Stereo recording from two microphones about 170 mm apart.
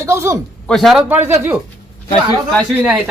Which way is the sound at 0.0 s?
15° right (ahead or behind).